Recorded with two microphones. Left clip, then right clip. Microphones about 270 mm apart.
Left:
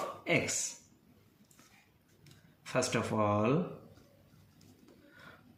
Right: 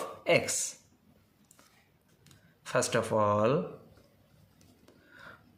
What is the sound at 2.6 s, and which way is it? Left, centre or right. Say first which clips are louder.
Speech: right 4 dB; right.